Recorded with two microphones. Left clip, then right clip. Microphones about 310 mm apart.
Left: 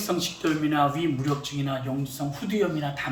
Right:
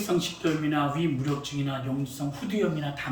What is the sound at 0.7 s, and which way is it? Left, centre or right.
Speech, centre.